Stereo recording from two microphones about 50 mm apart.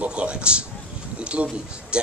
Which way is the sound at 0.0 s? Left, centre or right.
Right.